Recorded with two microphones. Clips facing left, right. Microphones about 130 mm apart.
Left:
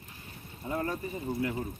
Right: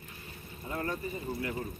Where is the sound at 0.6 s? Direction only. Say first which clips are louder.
Left 3 dB; 15° left (ahead or behind).